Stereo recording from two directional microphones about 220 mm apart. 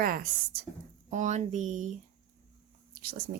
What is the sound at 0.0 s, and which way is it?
Speech, 40° right (ahead or behind).